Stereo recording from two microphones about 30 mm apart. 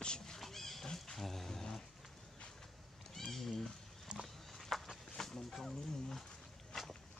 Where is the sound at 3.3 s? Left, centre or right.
Centre.